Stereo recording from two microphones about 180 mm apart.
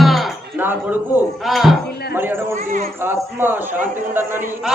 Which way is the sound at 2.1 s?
15° right (ahead or behind).